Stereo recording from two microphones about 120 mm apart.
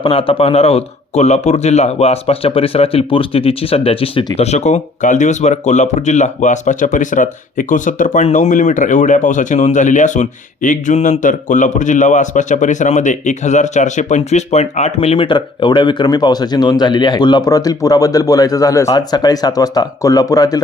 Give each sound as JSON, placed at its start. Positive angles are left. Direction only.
{"t": 0.0, "sound": "speech", "side_deg": 50}
{"t": 4.4, "sound": "speech", "side_deg": 65}
{"t": 15.3, "sound": "speech", "side_deg": 40}